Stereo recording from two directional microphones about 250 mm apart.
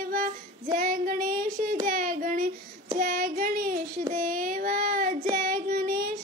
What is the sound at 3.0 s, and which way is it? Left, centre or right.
Child singing, right.